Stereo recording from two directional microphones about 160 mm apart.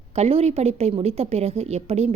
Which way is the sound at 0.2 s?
40° right (ahead or behind).